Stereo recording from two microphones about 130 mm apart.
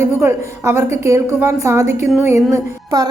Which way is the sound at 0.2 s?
20° right (ahead or behind).